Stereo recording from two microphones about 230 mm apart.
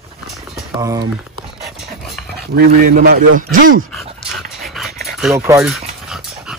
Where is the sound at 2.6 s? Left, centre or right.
Right.